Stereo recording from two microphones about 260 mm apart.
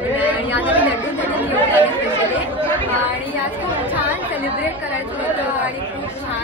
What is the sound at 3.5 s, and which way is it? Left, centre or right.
Speech, centre.